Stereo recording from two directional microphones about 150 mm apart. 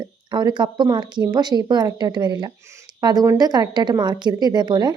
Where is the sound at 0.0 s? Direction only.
30° right (ahead or behind).